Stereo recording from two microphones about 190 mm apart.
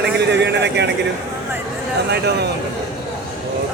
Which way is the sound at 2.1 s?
60° right (ahead or behind).